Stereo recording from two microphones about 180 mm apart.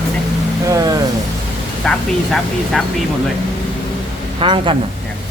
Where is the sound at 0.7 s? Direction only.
20° right (ahead or behind).